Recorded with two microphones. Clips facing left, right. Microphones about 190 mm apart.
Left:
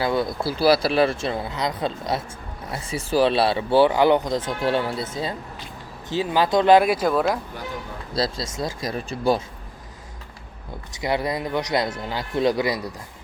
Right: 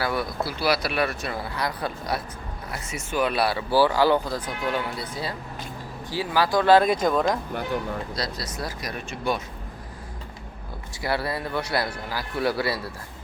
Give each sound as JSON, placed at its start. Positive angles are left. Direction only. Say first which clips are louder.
{"t": 0.0, "sound": "speech", "louder": "left 4 dB", "side_deg": 20}
{"t": 8.1, "sound": "speech", "louder": "left 5 dB", "side_deg": 25}
{"t": 10.9, "sound": "speech", "louder": "left 3 dB", "side_deg": 20}